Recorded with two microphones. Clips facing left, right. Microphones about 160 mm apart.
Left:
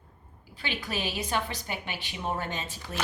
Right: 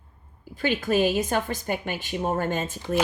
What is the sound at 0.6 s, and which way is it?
A woman's voice, 45° right (ahead or behind).